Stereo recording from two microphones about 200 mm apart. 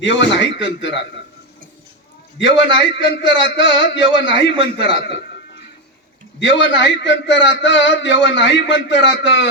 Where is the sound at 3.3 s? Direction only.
65° left (ahead or behind).